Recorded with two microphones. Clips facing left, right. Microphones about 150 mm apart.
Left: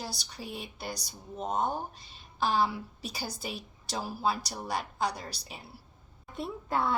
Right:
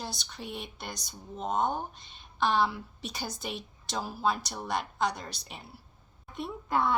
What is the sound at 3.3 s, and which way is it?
Speech, 5° left (ahead or behind).